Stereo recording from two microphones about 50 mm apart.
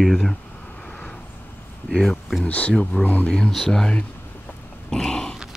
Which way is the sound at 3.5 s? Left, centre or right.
Centre.